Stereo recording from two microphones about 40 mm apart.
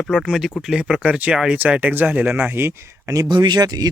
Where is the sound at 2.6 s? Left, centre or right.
Right.